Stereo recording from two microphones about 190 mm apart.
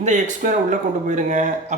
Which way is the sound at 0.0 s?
40° right (ahead or behind).